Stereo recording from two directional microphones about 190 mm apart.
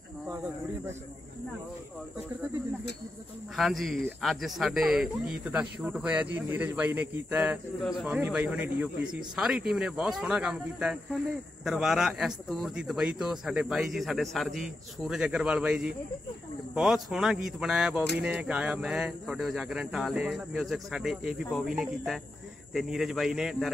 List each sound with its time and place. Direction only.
3.5 s a man's voice: centre (ahead or behind)